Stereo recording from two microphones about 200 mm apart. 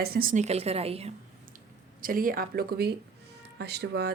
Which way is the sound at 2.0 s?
45° right (ahead or behind).